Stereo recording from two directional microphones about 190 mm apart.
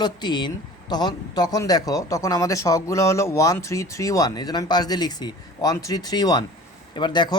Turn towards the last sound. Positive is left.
turn(degrees=25)  # may be behind; listen again after turning